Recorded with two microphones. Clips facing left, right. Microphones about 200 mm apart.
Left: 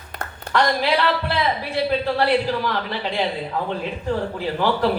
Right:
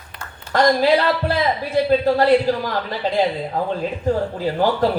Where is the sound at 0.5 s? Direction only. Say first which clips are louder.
Right 5 dB; 45° right (ahead or behind).